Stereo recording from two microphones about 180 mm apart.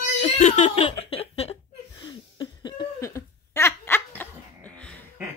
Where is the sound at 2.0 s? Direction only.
25° left (ahead or behind); by 4.9 s 5° left (ahead or behind).